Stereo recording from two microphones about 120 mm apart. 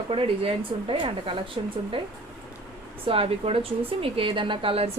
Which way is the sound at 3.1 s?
55° right (ahead or behind).